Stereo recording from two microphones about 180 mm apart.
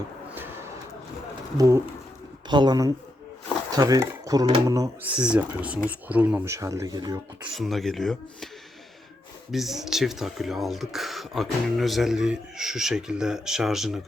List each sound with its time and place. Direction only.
1.5 s speech: 20° right (ahead or behind)
5.0 s speech: 5° right (ahead or behind); by 7.2 s 20° right (ahead or behind)
7.4 s speech: centre (ahead or behind)
9.5 s speech: centre (ahead or behind)